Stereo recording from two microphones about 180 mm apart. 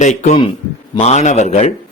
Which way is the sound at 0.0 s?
40° left (ahead or behind).